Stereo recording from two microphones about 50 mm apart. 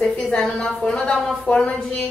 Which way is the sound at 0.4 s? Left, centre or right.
Centre.